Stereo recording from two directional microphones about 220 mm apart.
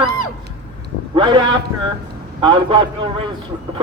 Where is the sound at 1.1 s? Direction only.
20° right (ahead or behind).